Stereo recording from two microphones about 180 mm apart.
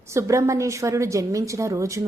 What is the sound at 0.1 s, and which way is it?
A woman's voice, 15° right (ahead or behind).